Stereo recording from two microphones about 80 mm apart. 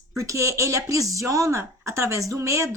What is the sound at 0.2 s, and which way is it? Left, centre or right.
A woman's voice, right.